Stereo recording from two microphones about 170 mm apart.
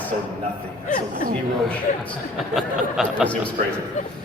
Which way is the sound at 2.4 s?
Centre (ahead or behind).